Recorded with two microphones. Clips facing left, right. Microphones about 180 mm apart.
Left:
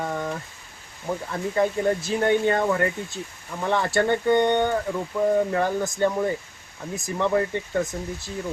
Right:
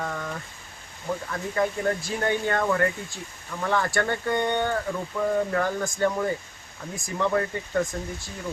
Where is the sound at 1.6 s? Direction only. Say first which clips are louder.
Left 3 dB; 25° left (ahead or behind).